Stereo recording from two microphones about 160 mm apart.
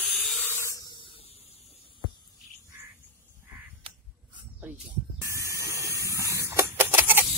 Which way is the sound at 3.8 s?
35° right (ahead or behind).